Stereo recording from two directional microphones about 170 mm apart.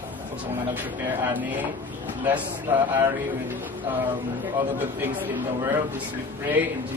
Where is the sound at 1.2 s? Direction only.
10° right (ahead or behind).